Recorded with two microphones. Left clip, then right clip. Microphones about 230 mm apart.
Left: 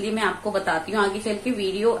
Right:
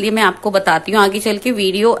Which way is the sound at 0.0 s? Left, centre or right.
Right.